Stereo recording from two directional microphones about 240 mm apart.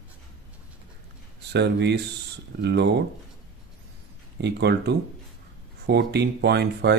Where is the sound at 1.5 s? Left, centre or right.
Right.